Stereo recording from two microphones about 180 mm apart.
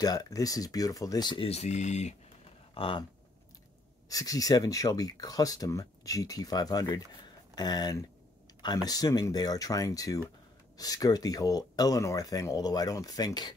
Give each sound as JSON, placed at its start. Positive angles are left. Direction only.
{"t": 0.0, "sound": "speech", "side_deg": 20}
{"t": 2.7, "sound": "speech", "side_deg": 30}
{"t": 4.1, "sound": "speech", "side_deg": 20}